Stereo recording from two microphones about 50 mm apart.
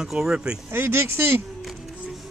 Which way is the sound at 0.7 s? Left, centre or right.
Right.